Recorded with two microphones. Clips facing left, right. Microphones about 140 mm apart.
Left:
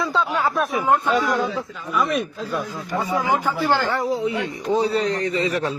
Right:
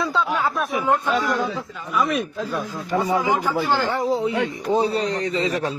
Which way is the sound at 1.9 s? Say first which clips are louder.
Even; centre (ahead or behind).